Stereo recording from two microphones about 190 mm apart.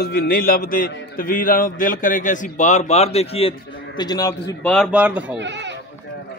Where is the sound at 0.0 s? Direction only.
55° left (ahead or behind); by 4.6 s 20° left (ahead or behind).